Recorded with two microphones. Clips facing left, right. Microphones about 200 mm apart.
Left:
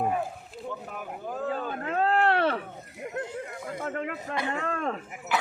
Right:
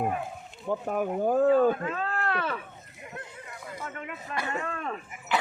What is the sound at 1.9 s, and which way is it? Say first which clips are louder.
Speech: left 7 dB; 70° left (ahead or behind).